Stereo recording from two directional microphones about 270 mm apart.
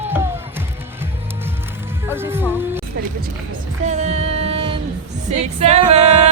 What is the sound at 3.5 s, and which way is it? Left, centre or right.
Speech, right.